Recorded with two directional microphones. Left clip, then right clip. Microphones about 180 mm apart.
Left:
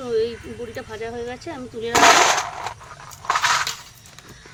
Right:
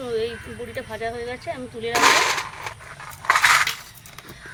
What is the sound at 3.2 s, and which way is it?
Dishes, 30° right (ahead or behind).